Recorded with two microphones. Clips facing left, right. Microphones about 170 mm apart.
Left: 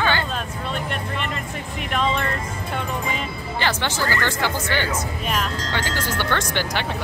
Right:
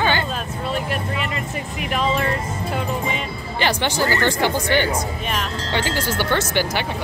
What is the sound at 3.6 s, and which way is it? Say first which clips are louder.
Speech: right 4 dB; 15° right (ahead or behind).